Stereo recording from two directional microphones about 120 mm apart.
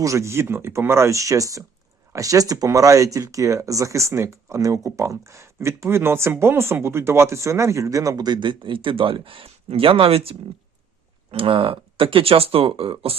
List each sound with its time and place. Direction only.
0.0 s speech: 25° right (ahead or behind); by 13.1 s 50° right (ahead or behind)